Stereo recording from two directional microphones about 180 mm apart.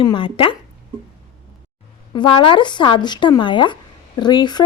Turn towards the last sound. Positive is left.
turn(degrees=25)  # may be behind; listen again after turning